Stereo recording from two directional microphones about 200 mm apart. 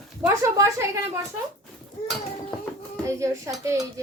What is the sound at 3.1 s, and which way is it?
Speech, 15° right (ahead or behind).